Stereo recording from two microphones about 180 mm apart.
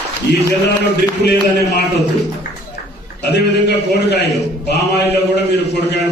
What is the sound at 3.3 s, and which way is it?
A man's voice, 70° left (ahead or behind).